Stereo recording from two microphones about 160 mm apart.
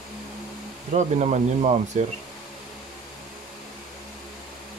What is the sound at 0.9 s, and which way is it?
Speech, 45° right (ahead or behind).